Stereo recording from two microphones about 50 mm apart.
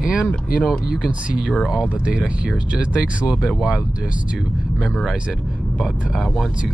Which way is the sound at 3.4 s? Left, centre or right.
Centre.